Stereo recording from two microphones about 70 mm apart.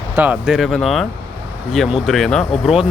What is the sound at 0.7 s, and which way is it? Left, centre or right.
Speech, centre.